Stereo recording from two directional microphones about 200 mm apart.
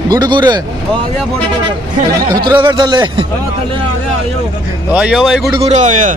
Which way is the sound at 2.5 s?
20° right (ahead or behind).